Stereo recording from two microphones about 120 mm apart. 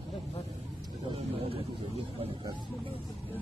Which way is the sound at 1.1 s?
55° right (ahead or behind).